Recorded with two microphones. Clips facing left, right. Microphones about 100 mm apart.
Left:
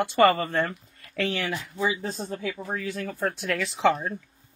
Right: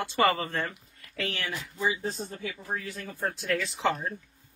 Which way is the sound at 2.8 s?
80° left.